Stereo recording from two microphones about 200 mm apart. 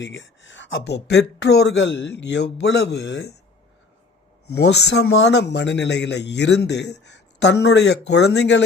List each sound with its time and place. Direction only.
0.0 s a man's voice: 70° left (ahead or behind)
4.5 s a man's voice: 55° left (ahead or behind)